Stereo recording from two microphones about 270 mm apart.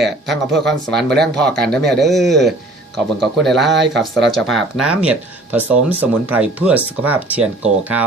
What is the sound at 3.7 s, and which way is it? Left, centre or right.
Speech, right.